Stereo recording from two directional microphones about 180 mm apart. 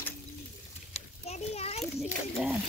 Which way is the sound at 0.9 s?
35° left (ahead or behind).